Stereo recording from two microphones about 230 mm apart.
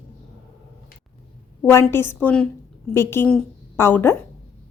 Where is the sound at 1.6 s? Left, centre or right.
Centre.